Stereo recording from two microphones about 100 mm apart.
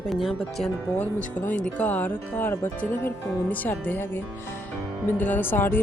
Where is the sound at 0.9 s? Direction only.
15° left (ahead or behind).